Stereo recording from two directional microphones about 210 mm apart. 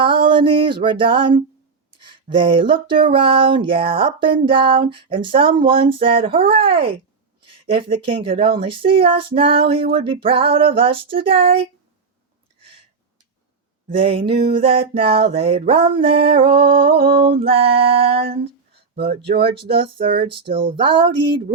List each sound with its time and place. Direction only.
0.0 s music: 25° right (ahead or behind)
2.3 s speech: 25° right (ahead or behind)
13.9 s speech: 25° right (ahead or behind)